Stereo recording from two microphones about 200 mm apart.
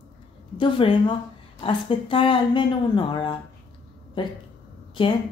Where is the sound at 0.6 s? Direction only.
25° left (ahead or behind).